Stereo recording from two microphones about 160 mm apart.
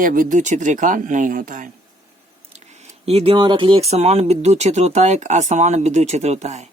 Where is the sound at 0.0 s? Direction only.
60° right (ahead or behind).